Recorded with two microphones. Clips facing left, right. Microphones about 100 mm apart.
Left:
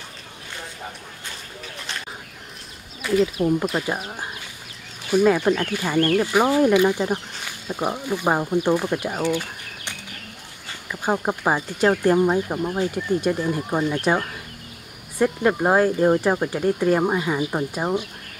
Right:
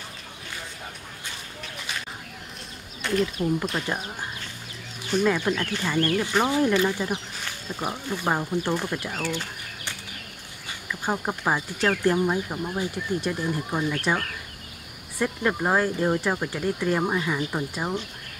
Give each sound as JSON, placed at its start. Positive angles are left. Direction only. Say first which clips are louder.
{"t": 3.0, "sound": "a sound", "louder": "left 5 dB", "side_deg": 5}
{"t": 3.3, "sound": "speech", "louder": "left 5 dB", "side_deg": 20}
{"t": 3.6, "sound": "speech", "louder": "left 5 dB", "side_deg": 5}
{"t": 3.9, "sound": "speech", "louder": "left 2 dB", "side_deg": 15}
{"t": 7.4, "sound": "a sound", "louder": "left 6 dB", "side_deg": 15}
{"t": 7.9, "sound": "speech", "louder": "left 4 dB", "side_deg": 15}